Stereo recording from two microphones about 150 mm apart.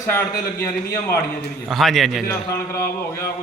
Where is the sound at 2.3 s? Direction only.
20° left (ahead or behind).